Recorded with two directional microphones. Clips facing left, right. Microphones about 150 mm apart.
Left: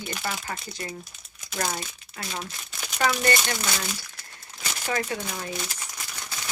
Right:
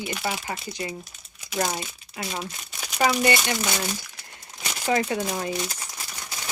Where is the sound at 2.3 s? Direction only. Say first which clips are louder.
Right 2 dB; 10° right (ahead or behind).